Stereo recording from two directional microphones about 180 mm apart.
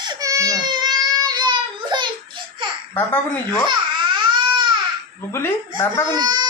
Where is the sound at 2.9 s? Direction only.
10° left (ahead or behind).